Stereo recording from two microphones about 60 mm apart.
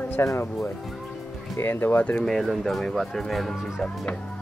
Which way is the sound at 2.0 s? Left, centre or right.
Left.